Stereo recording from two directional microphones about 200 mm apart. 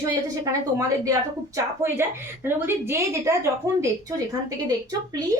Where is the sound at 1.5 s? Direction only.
10° right (ahead or behind).